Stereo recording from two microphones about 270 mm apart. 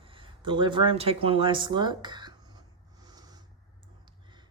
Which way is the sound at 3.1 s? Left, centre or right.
Centre.